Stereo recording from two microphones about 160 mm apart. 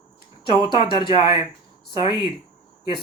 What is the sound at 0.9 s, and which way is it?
Speech, 30° left (ahead or behind).